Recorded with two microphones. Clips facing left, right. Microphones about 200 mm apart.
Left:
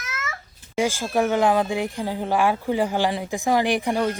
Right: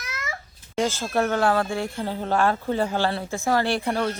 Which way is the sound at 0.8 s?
10° left (ahead or behind).